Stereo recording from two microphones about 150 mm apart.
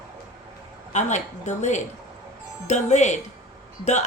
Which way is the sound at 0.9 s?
50° left (ahead or behind).